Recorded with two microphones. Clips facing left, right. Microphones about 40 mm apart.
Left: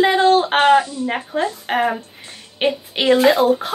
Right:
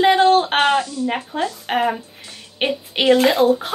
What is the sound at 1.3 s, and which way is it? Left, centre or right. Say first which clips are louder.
A woman's voice: left 3 dB; centre.